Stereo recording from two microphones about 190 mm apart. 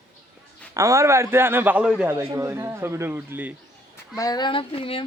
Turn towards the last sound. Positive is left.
turn(degrees=30)  # may be behind; listen again after turning